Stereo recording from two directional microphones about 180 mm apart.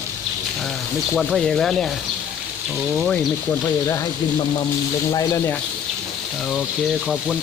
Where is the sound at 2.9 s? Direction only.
Centre (ahead or behind).